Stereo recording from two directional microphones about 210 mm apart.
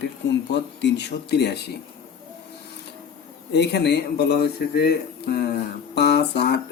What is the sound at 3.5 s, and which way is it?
Speech, 55° left (ahead or behind).